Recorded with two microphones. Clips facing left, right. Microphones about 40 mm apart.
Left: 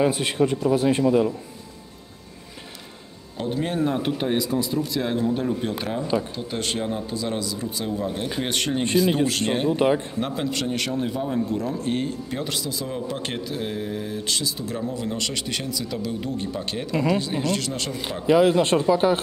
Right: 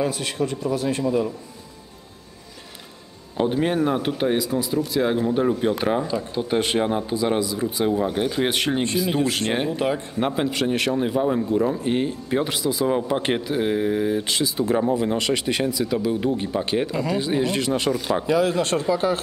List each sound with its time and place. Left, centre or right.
0.0 s a man's voice: left
3.3 s a man's voice: right
6.8 s speech: right
7.2 s speech: centre
8.5 s a man's voice: centre
9.8 s a man's voice: left
10.1 s a man's voice: centre
18.2 s a man's voice: left